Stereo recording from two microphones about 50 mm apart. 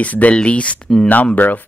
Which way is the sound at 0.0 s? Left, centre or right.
Left.